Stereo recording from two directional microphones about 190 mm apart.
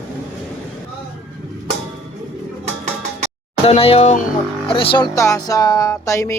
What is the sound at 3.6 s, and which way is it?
Speech, 30° left (ahead or behind).